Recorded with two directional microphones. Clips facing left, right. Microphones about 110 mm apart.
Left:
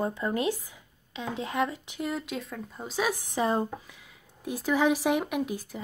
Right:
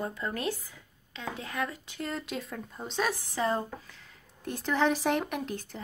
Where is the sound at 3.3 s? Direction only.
15° left (ahead or behind).